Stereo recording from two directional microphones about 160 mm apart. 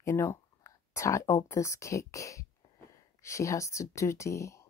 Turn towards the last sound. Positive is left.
turn(degrees=20)  # may be behind; listen again after turning